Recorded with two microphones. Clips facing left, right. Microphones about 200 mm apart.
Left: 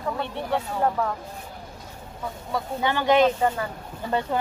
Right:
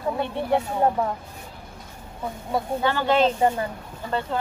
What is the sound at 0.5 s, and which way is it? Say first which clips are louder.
Speech: right 3 dB; 20° right (ahead or behind).